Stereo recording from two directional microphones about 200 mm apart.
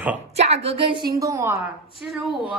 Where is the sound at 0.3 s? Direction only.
30° right (ahead or behind).